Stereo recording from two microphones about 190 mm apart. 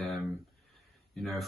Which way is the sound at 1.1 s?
Centre (ahead or behind).